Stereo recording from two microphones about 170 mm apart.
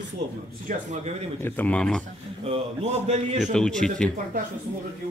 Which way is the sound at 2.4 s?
40° right (ahead or behind).